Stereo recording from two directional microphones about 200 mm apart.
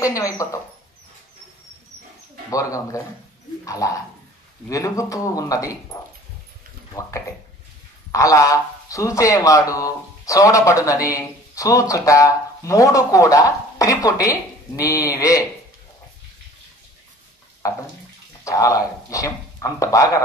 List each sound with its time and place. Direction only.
0.0 s speech: 15° left (ahead or behind)
2.5 s speech: 15° left (ahead or behind)
6.9 s speech: 15° left (ahead or behind)
18.4 s speech: 15° left (ahead or behind)